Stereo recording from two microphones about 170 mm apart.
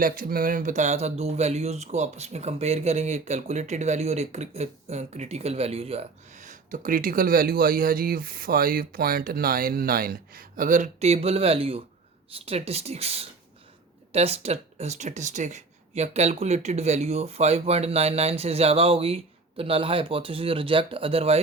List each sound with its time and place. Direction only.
0.0 s speech: 55° right (ahead or behind); by 21.4 s 35° right (ahead or behind)